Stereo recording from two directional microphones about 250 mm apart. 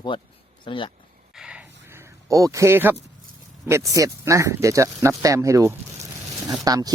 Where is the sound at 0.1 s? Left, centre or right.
Centre.